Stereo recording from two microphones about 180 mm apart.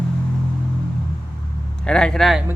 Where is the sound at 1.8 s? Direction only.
5° left (ahead or behind).